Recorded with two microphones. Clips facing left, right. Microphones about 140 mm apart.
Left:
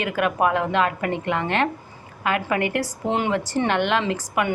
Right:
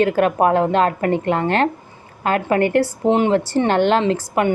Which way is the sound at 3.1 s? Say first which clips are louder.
Right 6 dB; 20° right (ahead or behind).